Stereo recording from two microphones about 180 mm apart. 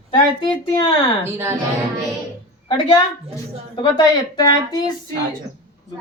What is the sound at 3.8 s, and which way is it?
Speech, 20° left (ahead or behind).